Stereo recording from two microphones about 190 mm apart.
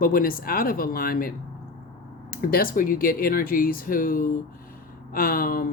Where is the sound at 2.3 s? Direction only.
50° left (ahead or behind).